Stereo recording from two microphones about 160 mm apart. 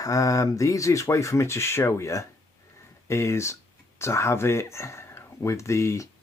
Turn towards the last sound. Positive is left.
turn(degrees=20)  # may be behind; listen again after turning